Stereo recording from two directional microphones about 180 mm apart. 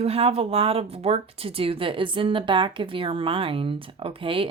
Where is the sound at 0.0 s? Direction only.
35° right (ahead or behind).